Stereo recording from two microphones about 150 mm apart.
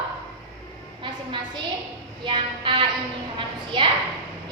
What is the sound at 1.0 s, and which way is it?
Speech, 30° right (ahead or behind).